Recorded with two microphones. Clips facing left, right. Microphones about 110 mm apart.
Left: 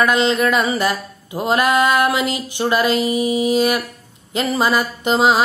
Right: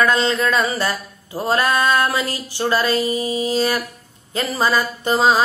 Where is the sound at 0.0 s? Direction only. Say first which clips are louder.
Left 2 dB; 15° left (ahead or behind).